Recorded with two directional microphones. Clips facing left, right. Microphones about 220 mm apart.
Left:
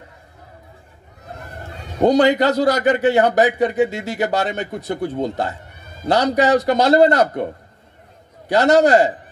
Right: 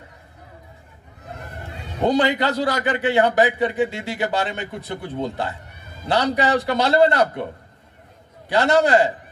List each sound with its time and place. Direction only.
2.0 s a man's voice: 45° left (ahead or behind)
8.5 s a man's voice: 40° left (ahead or behind)